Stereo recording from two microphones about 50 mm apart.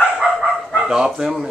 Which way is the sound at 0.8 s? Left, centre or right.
Centre.